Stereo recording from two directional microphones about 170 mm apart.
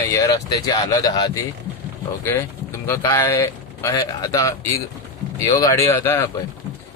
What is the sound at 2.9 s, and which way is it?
Speech, 20° left (ahead or behind).